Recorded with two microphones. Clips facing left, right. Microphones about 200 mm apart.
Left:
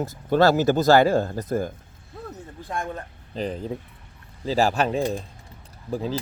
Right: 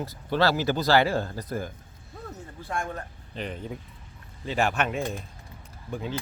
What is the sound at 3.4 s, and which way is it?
Speech, 35° left (ahead or behind).